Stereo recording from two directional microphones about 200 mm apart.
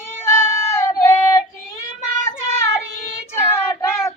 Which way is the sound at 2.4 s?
10° left (ahead or behind).